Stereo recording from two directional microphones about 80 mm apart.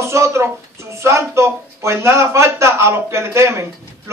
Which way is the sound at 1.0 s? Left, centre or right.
Right.